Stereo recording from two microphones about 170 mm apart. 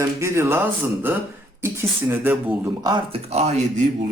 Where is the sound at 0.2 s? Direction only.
15° right (ahead or behind).